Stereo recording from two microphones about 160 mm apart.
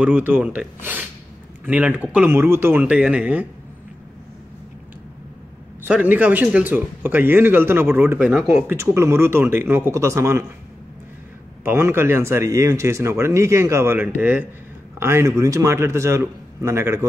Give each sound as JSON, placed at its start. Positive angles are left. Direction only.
{"t": 0.0, "sound": "speech", "side_deg": -10}
{"t": 5.9, "sound": "speech", "side_deg": -10}
{"t": 8.7, "sound": "speech", "side_deg": -15}
{"t": 11.6, "sound": "speech", "side_deg": -15}